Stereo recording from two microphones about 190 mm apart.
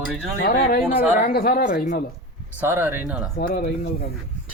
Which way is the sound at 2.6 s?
10° right (ahead or behind).